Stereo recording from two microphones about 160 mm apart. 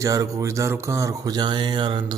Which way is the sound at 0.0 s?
20° right (ahead or behind).